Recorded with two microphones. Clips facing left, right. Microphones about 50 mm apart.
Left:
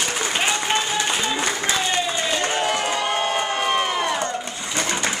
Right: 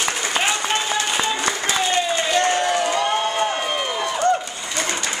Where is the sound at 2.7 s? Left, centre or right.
Left.